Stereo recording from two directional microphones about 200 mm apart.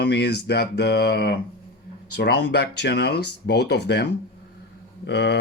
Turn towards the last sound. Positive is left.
turn(degrees=55)  # may be behind; listen again after turning